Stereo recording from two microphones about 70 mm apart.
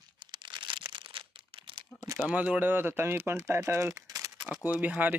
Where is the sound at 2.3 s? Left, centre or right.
Right.